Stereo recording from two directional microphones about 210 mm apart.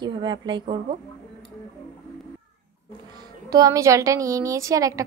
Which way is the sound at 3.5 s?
15° right (ahead or behind).